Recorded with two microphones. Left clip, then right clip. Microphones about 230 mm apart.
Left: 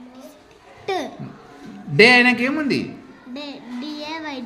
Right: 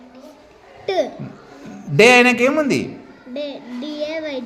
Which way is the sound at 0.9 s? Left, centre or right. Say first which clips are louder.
Right 5 dB; centre.